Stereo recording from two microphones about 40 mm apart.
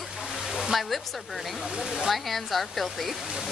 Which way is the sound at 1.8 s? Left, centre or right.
Centre.